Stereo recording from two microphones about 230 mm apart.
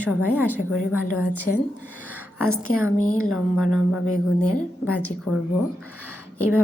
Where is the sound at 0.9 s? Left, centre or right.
Centre.